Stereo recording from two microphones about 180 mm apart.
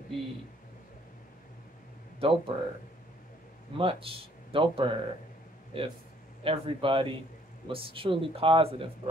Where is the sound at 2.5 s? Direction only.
25° right (ahead or behind).